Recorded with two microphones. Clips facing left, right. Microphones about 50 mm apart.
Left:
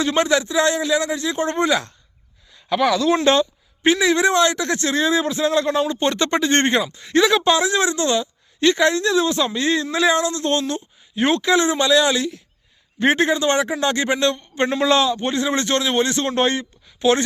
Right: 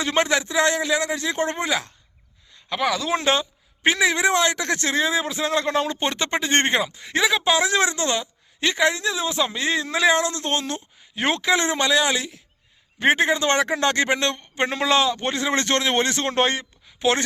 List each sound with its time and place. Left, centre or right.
0.0 s speech: right
1.5 s speech: centre
3.8 s speech: right
6.0 s speech: centre
6.4 s speech: right
11.9 s speech: right